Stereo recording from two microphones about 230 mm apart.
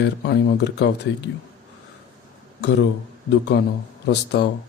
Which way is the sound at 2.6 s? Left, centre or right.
Left.